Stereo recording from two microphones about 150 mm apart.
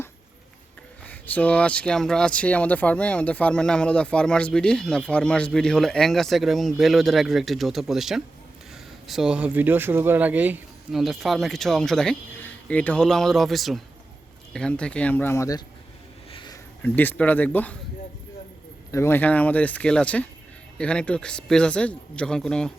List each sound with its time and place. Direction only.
1.0 s speech: 10° left (ahead or behind); by 11.0 s 10° right (ahead or behind)
11.0 s speech: centre (ahead or behind); by 15.6 s 20° left (ahead or behind)
16.3 s a sound: 30° left (ahead or behind)
16.8 s speech: 10° left (ahead or behind)
18.9 s speech: 15° left (ahead or behind)